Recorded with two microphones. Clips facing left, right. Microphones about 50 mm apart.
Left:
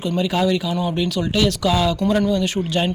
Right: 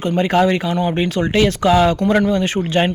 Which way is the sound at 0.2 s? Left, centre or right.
Right.